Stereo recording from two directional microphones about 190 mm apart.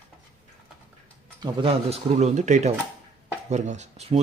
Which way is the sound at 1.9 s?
35° right (ahead or behind).